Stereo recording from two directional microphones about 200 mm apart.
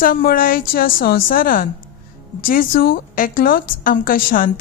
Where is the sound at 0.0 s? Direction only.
45° left (ahead or behind).